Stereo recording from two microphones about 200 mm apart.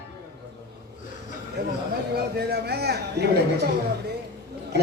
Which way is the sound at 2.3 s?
55° right (ahead or behind).